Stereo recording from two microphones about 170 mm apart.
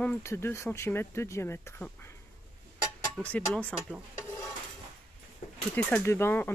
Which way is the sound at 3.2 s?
10° left (ahead or behind).